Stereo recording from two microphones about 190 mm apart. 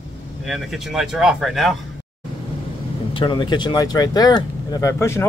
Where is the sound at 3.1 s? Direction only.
25° left (ahead or behind).